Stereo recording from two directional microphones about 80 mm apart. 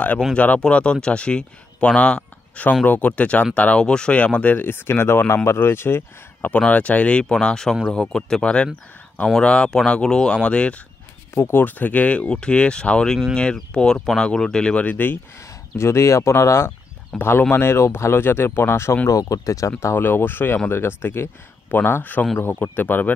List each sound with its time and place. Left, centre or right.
0.3 s speech: centre; by 6.5 s left
6.5 s speech: centre
11.3 s speech: left
15.8 s speech: left
19.0 s speech: left
19.8 s speech: left